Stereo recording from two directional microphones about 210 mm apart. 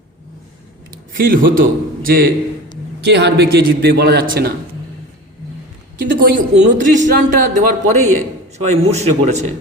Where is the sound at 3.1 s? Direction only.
55° right (ahead or behind).